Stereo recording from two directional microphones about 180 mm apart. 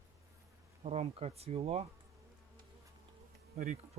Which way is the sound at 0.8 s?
35° right (ahead or behind).